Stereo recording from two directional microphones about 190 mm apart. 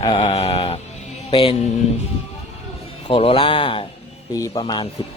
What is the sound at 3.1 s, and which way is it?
Speech, 30° left (ahead or behind).